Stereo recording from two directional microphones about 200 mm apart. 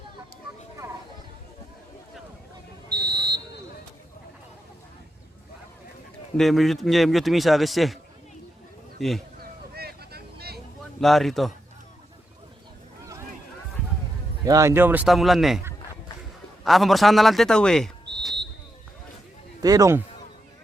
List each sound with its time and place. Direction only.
0.8 s a sound: 15° right (ahead or behind)
2.9 s whistle: 50° right (ahead or behind)
6.3 s a man's voice: centre (ahead or behind)
9.0 s speech: centre (ahead or behind)
9.4 s vehicle: 50° right (ahead or behind)
11.0 s a man's voice: centre (ahead or behind)
14.4 s a man's voice: 15° right (ahead or behind)
16.6 s speech: centre (ahead or behind)
19.6 s a man's voice: 15° right (ahead or behind)